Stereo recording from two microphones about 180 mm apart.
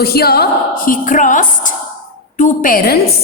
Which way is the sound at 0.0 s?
60° left (ahead or behind).